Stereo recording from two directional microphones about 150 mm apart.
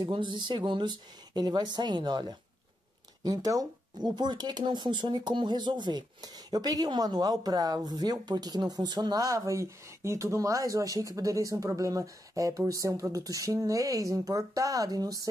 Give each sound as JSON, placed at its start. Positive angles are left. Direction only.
{"t": 0.0, "sound": "speech", "side_deg": -30}